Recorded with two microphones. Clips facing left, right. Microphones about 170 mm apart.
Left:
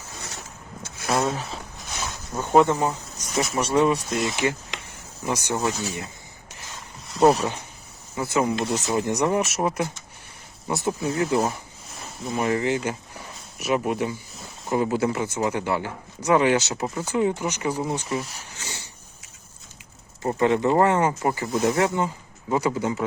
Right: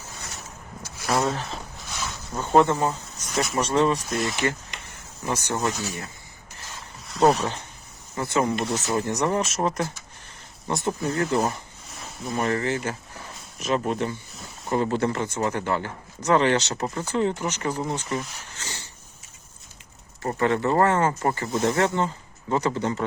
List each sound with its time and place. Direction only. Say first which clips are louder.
0.8 s a sound: even; 20° left (ahead or behind)
3.3 s speech: left 1 dB; centre (ahead or behind)
3.6 s speech: left 1 dB; 10° left (ahead or behind)
4.1 s speech: left 1 dB; centre (ahead or behind)
5.2 s speech: left 1 dB; 10° left (ahead or behind)
7.1 s speech: left 2 dB; centre (ahead or behind)
12.5 s speech: left 3 dB; 15° left (ahead or behind)
20.2 s speech: left 2 dB; 15° left (ahead or behind)